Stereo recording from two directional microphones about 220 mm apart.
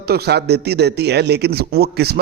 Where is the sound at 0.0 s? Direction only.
45° right (ahead or behind).